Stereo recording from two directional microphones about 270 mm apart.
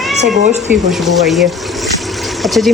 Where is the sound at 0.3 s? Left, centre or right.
Right.